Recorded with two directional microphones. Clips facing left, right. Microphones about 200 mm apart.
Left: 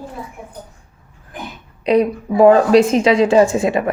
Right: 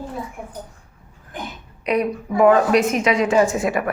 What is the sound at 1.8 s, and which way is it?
A woman's voice, 30° left (ahead or behind).